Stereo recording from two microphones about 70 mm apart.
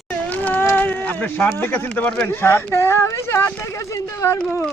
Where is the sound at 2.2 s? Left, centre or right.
Left.